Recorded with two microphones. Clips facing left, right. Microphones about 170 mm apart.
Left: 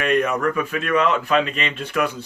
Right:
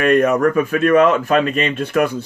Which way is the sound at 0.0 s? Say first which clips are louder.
Right 6 dB; 45° right (ahead or behind).